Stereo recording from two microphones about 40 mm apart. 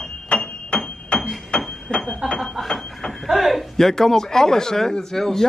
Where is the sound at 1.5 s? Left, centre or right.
Left.